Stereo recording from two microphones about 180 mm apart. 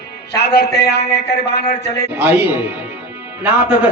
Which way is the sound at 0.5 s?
65° left (ahead or behind).